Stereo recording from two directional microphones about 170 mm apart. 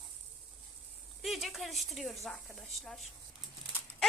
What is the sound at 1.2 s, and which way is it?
A woman's voice, centre (ahead or behind).